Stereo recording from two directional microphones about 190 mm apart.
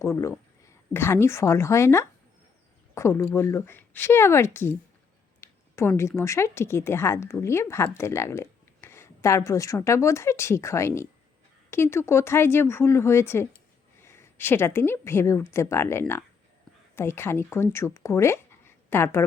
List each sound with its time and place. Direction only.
0.0 s a woman's voice: 15° left (ahead or behind)